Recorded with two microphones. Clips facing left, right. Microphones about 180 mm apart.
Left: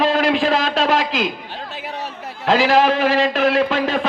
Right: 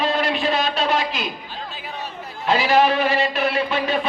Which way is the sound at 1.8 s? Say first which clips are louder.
Left 3 dB; 85° left.